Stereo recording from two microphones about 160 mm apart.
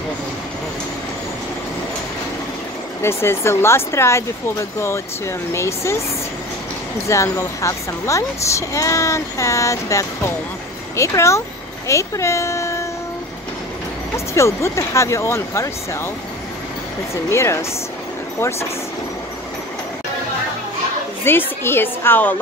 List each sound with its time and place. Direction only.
3.0 s speech: 15° left (ahead or behind)
7.1 s speech: 20° left (ahead or behind)
14.1 s speech: 15° left (ahead or behind)
17.1 s speech: 15° left (ahead or behind)
21.2 s speech: 15° left (ahead or behind)